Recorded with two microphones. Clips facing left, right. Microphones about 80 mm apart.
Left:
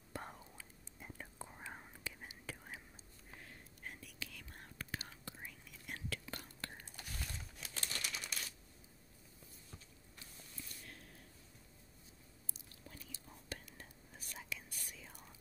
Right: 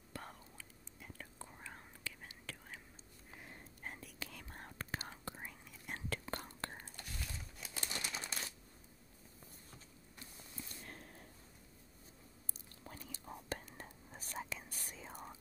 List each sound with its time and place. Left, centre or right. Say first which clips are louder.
0.1 s whispering: left 2 dB; centre
3.8 s whispering: right 2 dB; right
7.0 s crumpling: left 2 dB; centre
7.8 s typewriter: right 2 dB; right
10.3 s a sound: right 3 dB; right
12.8 s whispering: right 5 dB; right